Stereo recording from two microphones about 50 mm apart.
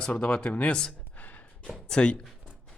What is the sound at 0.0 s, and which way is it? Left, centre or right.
Speech, centre.